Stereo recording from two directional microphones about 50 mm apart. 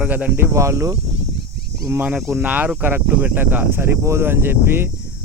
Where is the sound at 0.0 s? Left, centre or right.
Right.